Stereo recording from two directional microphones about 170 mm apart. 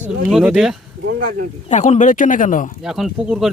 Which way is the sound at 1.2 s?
55° right (ahead or behind).